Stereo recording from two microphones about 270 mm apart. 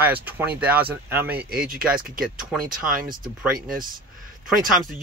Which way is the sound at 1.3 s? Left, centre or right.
Right.